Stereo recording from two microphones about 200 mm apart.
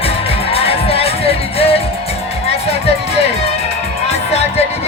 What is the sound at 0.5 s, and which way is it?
Music, 30° left (ahead or behind).